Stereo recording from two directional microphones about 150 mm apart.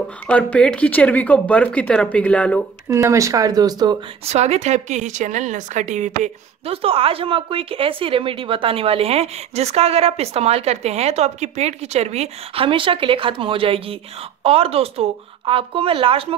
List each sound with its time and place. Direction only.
0.3 s speech: 10° left (ahead or behind)
2.9 s speech: 20° right (ahead or behind)
4.3 s a woman's voice: 45° right (ahead or behind)